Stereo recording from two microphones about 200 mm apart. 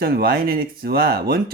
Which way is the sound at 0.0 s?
50° right (ahead or behind).